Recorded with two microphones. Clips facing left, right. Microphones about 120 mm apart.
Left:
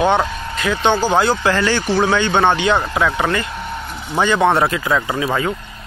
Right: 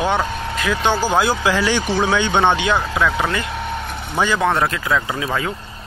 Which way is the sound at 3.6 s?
65° right (ahead or behind).